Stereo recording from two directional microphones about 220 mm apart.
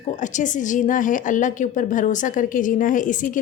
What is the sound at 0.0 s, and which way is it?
A woman's voice, 35° left (ahead or behind).